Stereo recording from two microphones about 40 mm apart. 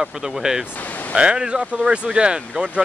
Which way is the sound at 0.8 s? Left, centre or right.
Left.